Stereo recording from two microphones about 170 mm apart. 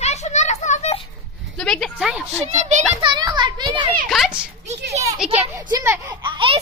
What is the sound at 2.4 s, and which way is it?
Speech, 45° right (ahead or behind).